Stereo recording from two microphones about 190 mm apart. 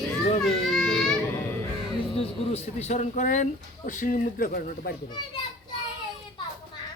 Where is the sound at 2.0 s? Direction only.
30° left (ahead or behind); by 4.9 s 50° left (ahead or behind).